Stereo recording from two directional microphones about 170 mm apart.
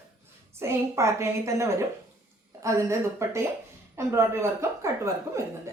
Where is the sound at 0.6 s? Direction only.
15° right (ahead or behind).